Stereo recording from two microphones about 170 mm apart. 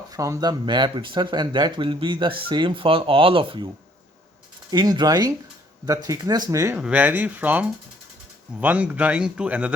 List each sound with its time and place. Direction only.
0.1 s speech: 20° right (ahead or behind)
4.7 s speech: 25° right (ahead or behind)
6.7 s speech: 5° right (ahead or behind)